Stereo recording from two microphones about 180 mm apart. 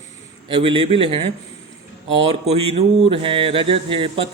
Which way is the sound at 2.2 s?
35° right (ahead or behind).